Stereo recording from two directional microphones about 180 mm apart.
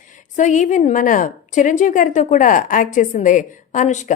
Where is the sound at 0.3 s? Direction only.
45° left (ahead or behind).